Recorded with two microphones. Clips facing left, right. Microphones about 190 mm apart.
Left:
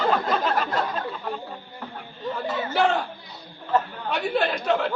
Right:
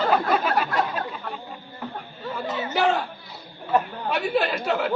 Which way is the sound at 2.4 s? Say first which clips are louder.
Even; 20° right (ahead or behind).